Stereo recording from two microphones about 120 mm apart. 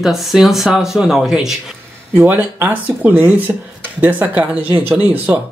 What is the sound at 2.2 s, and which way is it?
Speech, 15° right (ahead or behind).